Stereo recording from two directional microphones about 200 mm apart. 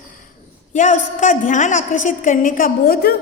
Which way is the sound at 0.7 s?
40° left (ahead or behind).